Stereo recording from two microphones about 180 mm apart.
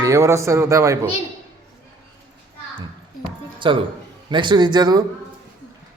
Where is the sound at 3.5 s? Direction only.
25° right (ahead or behind).